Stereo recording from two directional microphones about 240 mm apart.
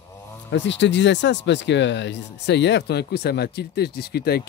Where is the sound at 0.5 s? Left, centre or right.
Left.